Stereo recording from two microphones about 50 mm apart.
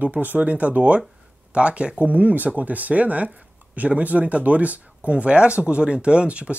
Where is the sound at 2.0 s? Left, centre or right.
Right.